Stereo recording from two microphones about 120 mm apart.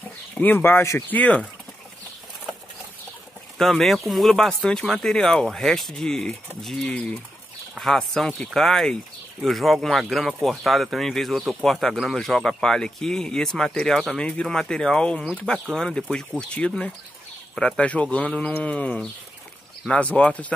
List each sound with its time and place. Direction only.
0.3 s speech: 15° left (ahead or behind)
3.5 s speech: centre (ahead or behind)